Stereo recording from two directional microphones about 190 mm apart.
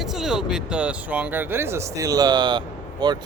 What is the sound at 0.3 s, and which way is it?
Speech, 5° right (ahead or behind).